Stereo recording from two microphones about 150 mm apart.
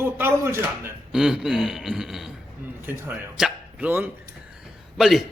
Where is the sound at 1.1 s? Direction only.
5° right (ahead or behind).